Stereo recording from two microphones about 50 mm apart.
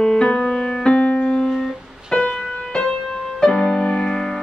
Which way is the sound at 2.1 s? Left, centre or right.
Centre.